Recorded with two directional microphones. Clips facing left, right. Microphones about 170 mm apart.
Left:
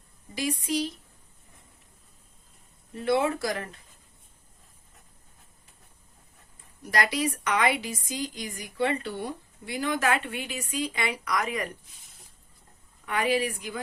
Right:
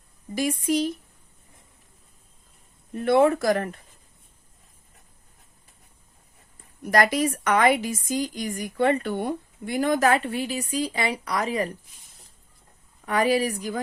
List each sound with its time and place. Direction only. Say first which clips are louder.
0.3 s a woman's voice: right 5 dB; 50° right (ahead or behind)
2.9 s a woman's voice: right 6 dB; 50° right (ahead or behind)
6.9 s a woman's voice: right 6 dB; 50° right (ahead or behind); by 11.7 s 30° right (ahead or behind)
13.1 s speech: right 4 dB; 40° right (ahead or behind)